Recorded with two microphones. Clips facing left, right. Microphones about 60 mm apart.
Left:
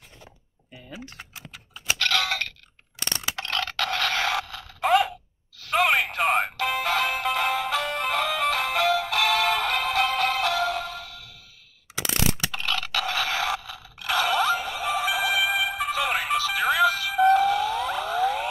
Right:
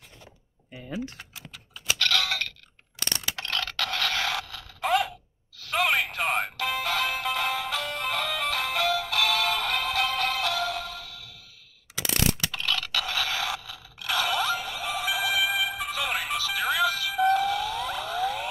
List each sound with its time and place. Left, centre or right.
1.3 s a sound: left
3.4 s scrape: left
5.6 s music: left
11.9 s scrape: left